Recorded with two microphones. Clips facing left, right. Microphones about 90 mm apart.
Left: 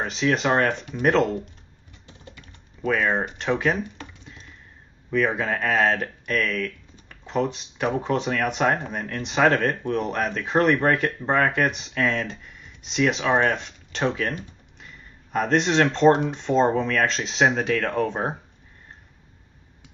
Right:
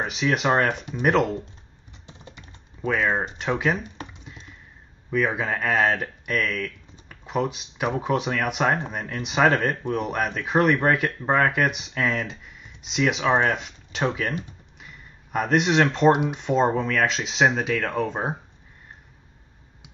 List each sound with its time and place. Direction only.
0.0 s speech: 5° right (ahead or behind)
2.0 s typing: 20° right (ahead or behind)
2.9 s speech: 10° right (ahead or behind)
5.1 s speech: 5° right (ahead or behind)
15.3 s speech: 5° right (ahead or behind)